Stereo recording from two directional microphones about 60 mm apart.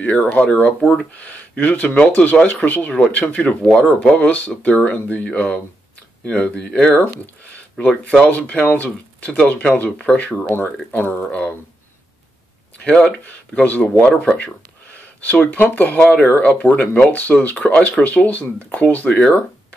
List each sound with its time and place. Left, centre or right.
0.0 s speech: left
3.3 s speech: centre
12.7 s speech: left
14.0 s speech: centre
15.0 s speech: left
16.0 s speech: centre
16.3 s speech: left
19.0 s speech: centre